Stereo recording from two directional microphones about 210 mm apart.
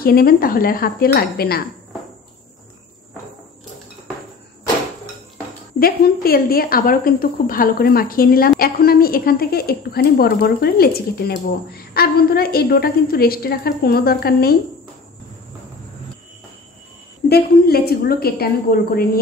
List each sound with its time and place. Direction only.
0.0 s a woman's voice: 45° left (ahead or behind)
5.8 s a woman's voice: 45° left (ahead or behind)
17.3 s a woman's voice: 50° left (ahead or behind)